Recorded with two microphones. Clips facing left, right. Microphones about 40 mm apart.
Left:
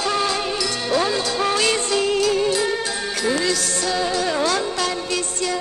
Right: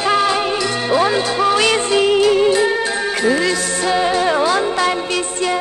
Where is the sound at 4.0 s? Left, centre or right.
Right.